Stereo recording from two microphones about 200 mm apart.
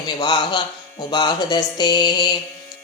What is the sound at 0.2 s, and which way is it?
Speech, 20° left (ahead or behind).